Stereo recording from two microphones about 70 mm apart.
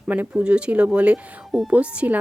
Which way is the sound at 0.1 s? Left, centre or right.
Centre.